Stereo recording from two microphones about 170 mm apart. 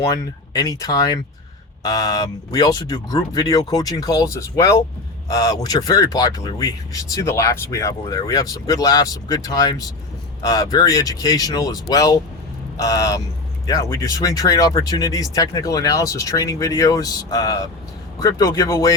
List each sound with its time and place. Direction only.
0.1 s speech: 20° left (ahead or behind)